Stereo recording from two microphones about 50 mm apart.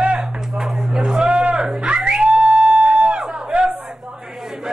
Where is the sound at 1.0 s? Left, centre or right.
Centre.